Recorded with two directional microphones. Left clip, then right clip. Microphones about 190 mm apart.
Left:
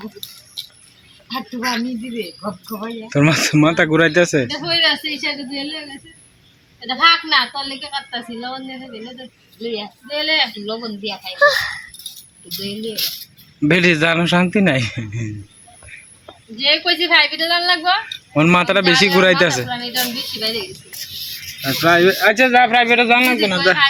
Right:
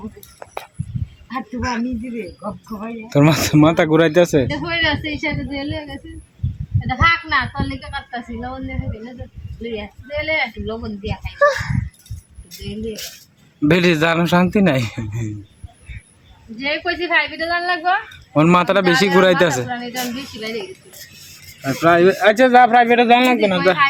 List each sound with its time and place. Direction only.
1.3 s a woman's voice: 10° right (ahead or behind)
2.4 s a woman's voice: 5° left (ahead or behind)
3.1 s a man's voice: 10° right (ahead or behind)
4.5 s a woman's voice: 40° left (ahead or behind)
6.7 s a woman's voice: 20° left (ahead or behind)
7.3 s a woman's voice: 5° left (ahead or behind)
9.6 s a man's voice: 20° right (ahead or behind)
10.2 s a woman's voice: 5° left (ahead or behind)
13.6 s a man's voice: 5° right (ahead or behind)
16.6 s a woman's voice: 5° left (ahead or behind)
18.3 s a man's voice: 5° right (ahead or behind)
19.6 s speech: 10° left (ahead or behind)
21.6 s a woman's voice: centre (ahead or behind)
22.4 s a man's voice: 25° right (ahead or behind)